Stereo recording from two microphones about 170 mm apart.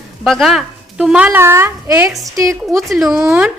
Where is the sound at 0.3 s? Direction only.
Centre (ahead or behind); by 2.6 s 20° right (ahead or behind).